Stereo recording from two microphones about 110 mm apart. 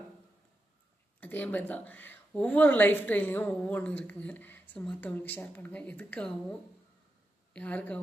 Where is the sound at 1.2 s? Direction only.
15° left (ahead or behind).